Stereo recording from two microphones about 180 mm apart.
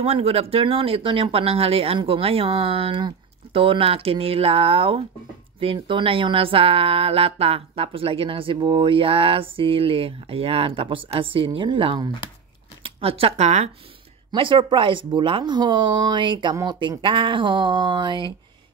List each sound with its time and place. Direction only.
0.0 s speech: 35° right (ahead or behind)
14.3 s speech: 25° right (ahead or behind)